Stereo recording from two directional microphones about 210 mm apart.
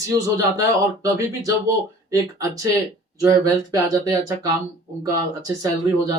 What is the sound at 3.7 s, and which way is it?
Speech, 15° right (ahead or behind).